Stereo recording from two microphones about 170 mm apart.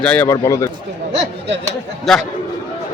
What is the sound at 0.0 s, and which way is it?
Speech, 5° left (ahead or behind).